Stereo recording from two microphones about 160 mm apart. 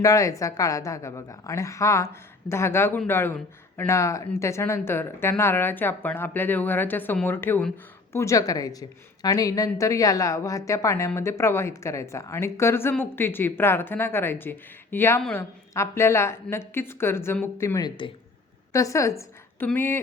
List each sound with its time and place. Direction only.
0.0 s a woman's voice: 20° left (ahead or behind)